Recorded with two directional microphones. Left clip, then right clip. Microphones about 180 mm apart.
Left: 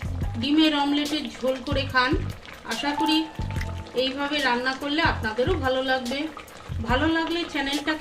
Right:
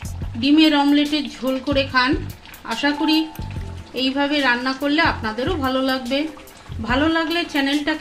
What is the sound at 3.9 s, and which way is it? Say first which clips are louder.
A woman's voice: right 5 dB; 55° right (ahead or behind).